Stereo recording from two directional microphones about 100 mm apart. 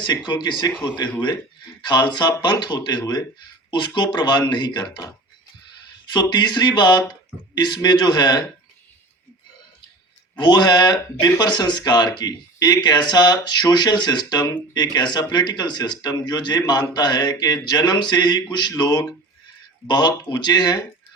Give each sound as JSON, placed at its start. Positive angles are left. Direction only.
{"t": 0.3, "sound": "speech", "side_deg": 45}
{"t": 10.3, "sound": "speech", "side_deg": 45}